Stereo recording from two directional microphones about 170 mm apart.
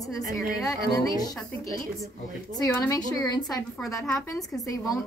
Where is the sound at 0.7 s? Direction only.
20° left (ahead or behind).